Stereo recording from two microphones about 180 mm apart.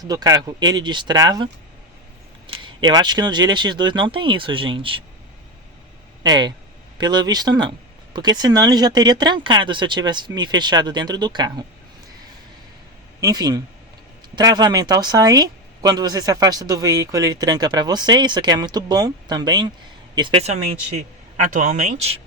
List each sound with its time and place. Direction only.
0.0 s speech: 20° right (ahead or behind)
2.5 s speech: 25° right (ahead or behind)
6.2 s speech: 25° right (ahead or behind)
13.1 s a man's voice: 20° right (ahead or behind); by 22.2 s 40° right (ahead or behind)